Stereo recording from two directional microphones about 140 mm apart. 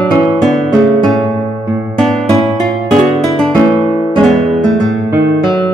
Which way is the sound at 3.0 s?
Centre (ahead or behind).